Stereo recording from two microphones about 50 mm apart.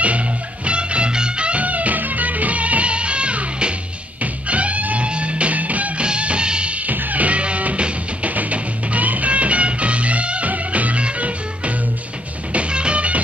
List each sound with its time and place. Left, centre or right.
0.0 s music: right
6.9 s music: right